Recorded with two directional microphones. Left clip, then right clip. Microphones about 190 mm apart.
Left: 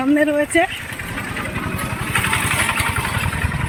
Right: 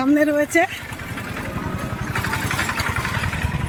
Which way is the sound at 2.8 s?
55° left (ahead or behind).